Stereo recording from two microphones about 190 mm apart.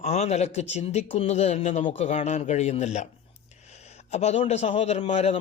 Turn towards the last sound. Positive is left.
turn(degrees=35)  # may be behind; listen again after turning